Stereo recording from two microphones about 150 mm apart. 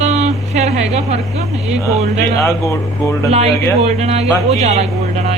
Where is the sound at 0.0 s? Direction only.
45° right (ahead or behind).